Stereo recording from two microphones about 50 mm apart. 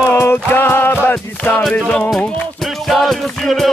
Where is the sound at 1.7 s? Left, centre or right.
Left.